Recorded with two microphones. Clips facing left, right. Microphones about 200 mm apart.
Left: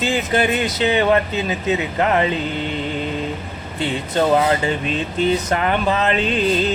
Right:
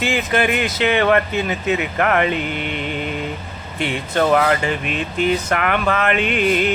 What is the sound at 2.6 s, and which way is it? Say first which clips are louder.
Music: left 1 dB; 20° right (ahead or behind).